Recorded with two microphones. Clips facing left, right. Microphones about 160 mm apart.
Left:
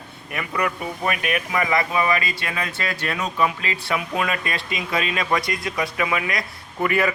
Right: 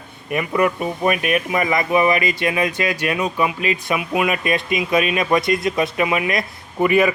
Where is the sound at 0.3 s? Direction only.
20° right (ahead or behind).